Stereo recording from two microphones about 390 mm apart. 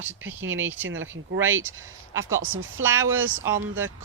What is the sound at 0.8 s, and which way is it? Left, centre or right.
Speech, right.